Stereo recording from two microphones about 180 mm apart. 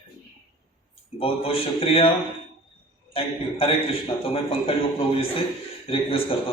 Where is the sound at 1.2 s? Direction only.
30° left (ahead or behind).